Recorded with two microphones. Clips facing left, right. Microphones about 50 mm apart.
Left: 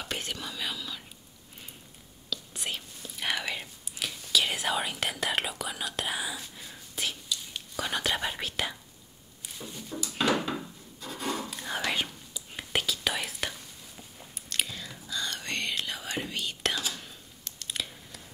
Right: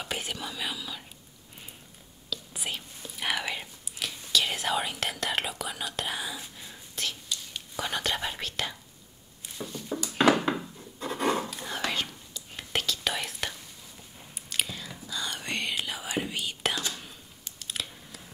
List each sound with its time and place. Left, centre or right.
0.0 s whispering: centre
2.2 s whispering: centre
7.7 s speech: centre
9.8 s a sound: right
11.5 s whispering: centre
11.8 s whispering: centre
17.0 s a sound: centre